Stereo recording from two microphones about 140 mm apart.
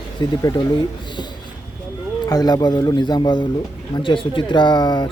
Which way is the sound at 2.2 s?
30° left (ahead or behind).